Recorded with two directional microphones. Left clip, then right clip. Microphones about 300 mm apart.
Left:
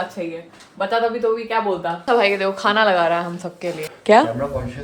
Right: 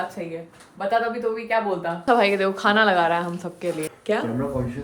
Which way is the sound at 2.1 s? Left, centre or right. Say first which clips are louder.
Left 2 dB; centre.